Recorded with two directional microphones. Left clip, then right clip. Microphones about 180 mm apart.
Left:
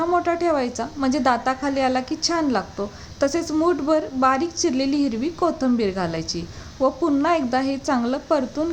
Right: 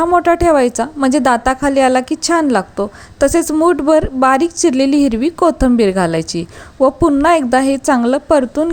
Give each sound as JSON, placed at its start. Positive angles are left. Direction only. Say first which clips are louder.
{"t": 0.0, "sound": "a woman's voice", "louder": "right 9 dB", "side_deg": -45}